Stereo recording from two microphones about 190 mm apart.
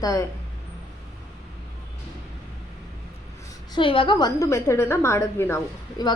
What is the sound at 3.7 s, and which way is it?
A woman's voice, 25° left (ahead or behind).